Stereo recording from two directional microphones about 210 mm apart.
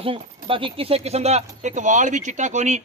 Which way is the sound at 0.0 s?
25° right (ahead or behind).